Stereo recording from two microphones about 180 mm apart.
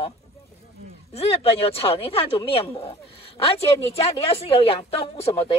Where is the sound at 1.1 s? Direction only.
35° left (ahead or behind).